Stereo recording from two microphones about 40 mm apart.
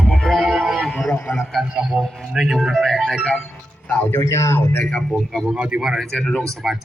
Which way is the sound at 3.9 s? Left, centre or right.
Left.